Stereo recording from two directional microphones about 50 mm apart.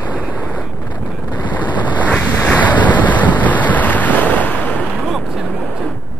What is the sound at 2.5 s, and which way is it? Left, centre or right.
Waves, left.